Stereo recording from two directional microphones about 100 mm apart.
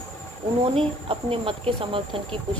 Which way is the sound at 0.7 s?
70° right (ahead or behind).